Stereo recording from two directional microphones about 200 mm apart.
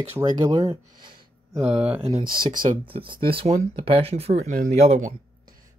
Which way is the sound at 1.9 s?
30° right (ahead or behind).